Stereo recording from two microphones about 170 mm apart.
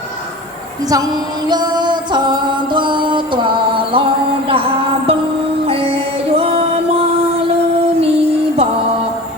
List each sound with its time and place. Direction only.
1.5 s music: 25° right (ahead or behind)
5.6 s music: 35° right (ahead or behind)